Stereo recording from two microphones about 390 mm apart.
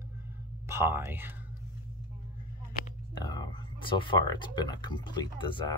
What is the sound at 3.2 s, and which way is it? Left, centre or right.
Speech, centre.